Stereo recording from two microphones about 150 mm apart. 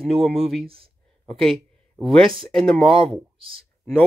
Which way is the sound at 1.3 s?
Centre (ahead or behind).